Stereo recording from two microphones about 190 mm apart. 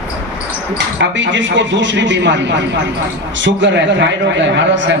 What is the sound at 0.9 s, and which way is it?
A man's voice, 70° right (ahead or behind).